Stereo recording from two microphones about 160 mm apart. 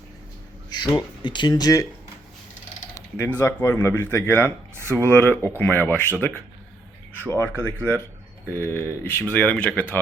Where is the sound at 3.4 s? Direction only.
10° left (ahead or behind).